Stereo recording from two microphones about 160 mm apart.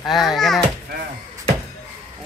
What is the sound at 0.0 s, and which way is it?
Speech, centre (ahead or behind).